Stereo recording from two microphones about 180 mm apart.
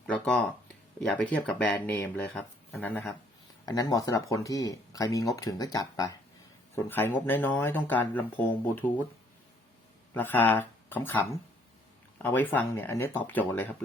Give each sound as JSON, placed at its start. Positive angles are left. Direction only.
{"t": 0.1, "sound": "speech", "side_deg": 5}
{"t": 10.2, "sound": "speech", "side_deg": 10}